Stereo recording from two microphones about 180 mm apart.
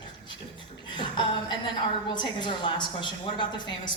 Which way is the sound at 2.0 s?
25° left (ahead or behind).